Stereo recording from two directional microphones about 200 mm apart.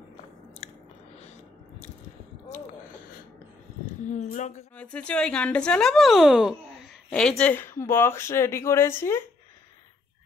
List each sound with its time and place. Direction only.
3.8 s a woman's voice: 35° left (ahead or behind)
4.7 s speech: 5° left (ahead or behind)